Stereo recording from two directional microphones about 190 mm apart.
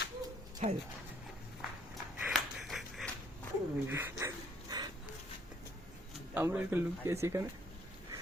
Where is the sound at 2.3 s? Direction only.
Centre (ahead or behind).